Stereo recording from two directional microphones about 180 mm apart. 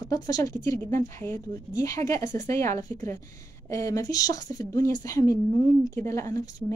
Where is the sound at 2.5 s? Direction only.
15° left (ahead or behind).